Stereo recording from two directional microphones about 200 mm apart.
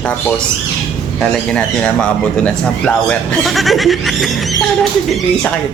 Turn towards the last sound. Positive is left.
turn(degrees=0)  # may be behind; listen again after turning